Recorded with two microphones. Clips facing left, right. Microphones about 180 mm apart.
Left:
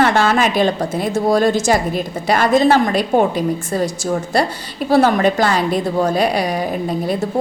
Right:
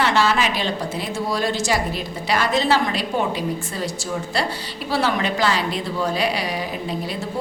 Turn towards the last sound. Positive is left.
turn(degrees=50)  # may be behind; listen again after turning